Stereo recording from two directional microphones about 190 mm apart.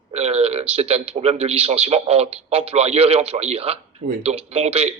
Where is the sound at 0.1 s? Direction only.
35° right (ahead or behind).